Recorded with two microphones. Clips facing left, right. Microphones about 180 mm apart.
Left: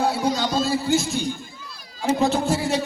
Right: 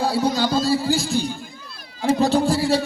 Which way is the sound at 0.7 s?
30° right (ahead or behind).